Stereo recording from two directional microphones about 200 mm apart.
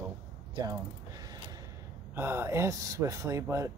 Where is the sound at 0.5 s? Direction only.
20° right (ahead or behind).